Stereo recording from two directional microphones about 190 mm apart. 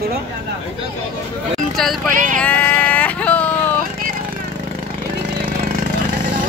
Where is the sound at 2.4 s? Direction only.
10° left (ahead or behind).